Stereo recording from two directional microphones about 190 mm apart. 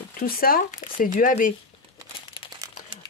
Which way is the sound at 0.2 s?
50° left (ahead or behind).